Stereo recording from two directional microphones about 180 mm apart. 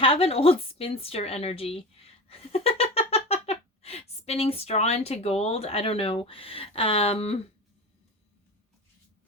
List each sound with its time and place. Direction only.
0.0 s a woman's voice: 30° left (ahead or behind)